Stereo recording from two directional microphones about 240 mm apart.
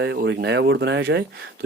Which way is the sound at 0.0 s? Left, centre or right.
Right.